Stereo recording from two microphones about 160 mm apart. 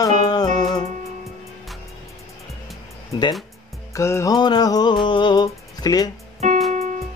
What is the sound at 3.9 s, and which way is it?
Music, 20° left (ahead or behind).